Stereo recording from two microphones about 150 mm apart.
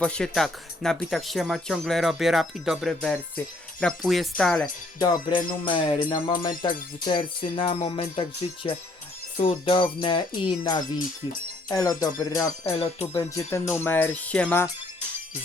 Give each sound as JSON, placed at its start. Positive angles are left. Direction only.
{"t": 0.0, "sound": "speech", "side_deg": 5}
{"t": 4.6, "sound": "music", "side_deg": 25}
{"t": 11.7, "sound": "speech", "side_deg": 25}
{"t": 12.8, "sound": "music", "side_deg": 40}
{"t": 13.3, "sound": "speech", "side_deg": 20}